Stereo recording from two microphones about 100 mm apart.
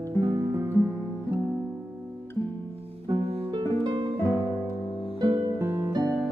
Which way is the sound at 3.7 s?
70° right (ahead or behind).